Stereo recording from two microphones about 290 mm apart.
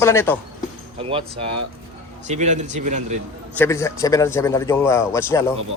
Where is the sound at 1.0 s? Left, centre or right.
Centre.